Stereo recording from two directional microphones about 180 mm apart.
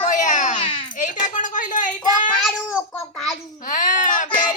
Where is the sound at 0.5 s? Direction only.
25° left (ahead or behind).